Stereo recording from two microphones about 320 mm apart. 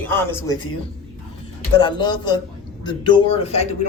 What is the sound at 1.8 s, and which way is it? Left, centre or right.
A man's voice, centre.